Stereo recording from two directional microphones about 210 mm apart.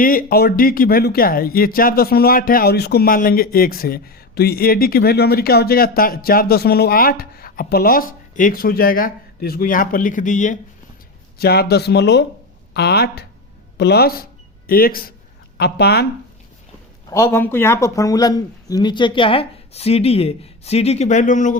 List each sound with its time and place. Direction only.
0.0 s speech: 40° left (ahead or behind)
11.3 s speech: 45° left (ahead or behind)
17.1 s speech: 15° left (ahead or behind); by 21.6 s 35° left (ahead or behind)